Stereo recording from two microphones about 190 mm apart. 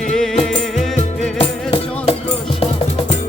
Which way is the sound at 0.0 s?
5° left (ahead or behind).